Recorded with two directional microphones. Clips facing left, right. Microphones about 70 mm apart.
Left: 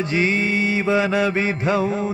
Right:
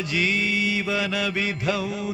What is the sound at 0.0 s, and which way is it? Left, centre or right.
Mantra, left.